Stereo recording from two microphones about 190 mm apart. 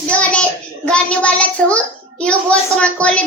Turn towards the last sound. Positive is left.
turn(degrees=5)  # may be behind; listen again after turning